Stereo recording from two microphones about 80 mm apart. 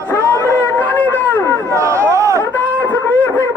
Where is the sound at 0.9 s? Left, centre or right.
Left.